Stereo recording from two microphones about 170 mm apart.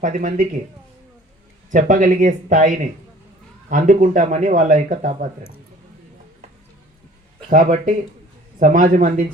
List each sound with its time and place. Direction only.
0.0 s a man's voice: 45° right (ahead or behind)
1.7 s a man's voice: 50° right (ahead or behind)
7.5 s a man's voice: 50° right (ahead or behind)